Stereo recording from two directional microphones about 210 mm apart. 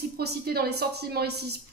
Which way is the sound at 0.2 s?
50° right (ahead or behind).